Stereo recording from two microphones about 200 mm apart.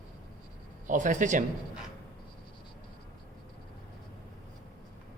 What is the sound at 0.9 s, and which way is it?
Speech, 40° right (ahead or behind).